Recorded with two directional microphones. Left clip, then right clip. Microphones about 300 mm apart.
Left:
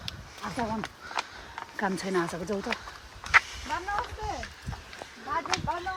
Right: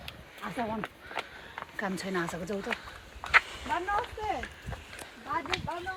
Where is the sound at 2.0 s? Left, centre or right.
Left.